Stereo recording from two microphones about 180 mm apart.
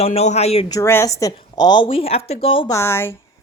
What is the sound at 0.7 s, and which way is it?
A woman's voice, 15° left (ahead or behind).